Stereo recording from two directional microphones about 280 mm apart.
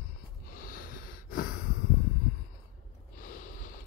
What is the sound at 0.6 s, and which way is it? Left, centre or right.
Snort, left.